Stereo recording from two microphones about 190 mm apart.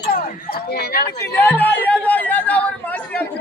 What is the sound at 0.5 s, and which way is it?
Speech, 55° left (ahead or behind).